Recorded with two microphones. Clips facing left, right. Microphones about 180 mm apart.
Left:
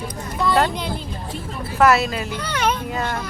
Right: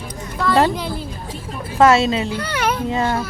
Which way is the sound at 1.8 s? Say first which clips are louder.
Right 3 dB; 25° right (ahead or behind).